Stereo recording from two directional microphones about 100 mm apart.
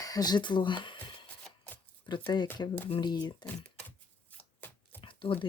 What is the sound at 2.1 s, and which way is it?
Speech, 50° left (ahead or behind).